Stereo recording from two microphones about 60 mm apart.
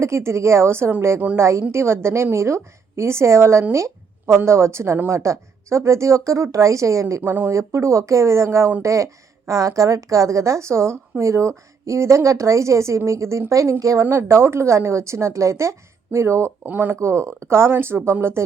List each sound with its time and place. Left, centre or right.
0.0 s a woman's voice: right
7.3 s speech: right
7.5 s a woman's voice: right
13.5 s a woman's voice: right
16.6 s speech: right
16.9 s a woman's voice: right